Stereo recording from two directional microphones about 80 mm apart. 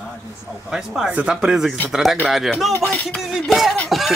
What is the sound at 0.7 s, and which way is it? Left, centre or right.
Speech, centre.